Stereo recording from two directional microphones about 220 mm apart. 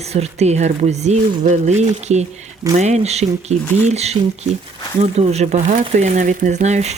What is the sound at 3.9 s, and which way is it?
Speech, 30° right (ahead or behind).